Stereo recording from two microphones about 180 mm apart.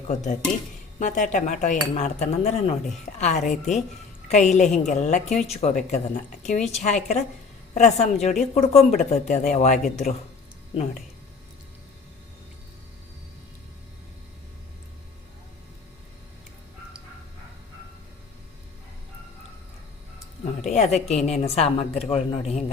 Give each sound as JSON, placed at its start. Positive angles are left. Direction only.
{"t": 0.1, "sound": "a woman's voice", "side_deg": 45}
{"t": 20.7, "sound": "a woman's voice", "side_deg": 40}